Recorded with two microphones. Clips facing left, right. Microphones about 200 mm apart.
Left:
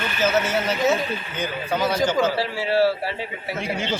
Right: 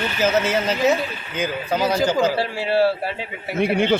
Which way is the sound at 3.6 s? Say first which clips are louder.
Right 9 dB; 60° right (ahead or behind).